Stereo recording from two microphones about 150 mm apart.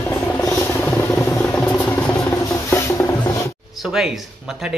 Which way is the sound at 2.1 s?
20° left (ahead or behind).